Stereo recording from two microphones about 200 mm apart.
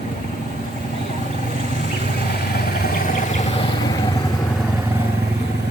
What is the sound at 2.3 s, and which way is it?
Vehicle, 50° left (ahead or behind).